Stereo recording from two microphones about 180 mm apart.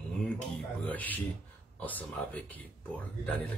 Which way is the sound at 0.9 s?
10° left (ahead or behind).